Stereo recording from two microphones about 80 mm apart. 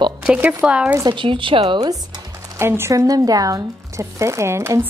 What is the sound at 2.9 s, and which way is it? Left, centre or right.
Speech, right.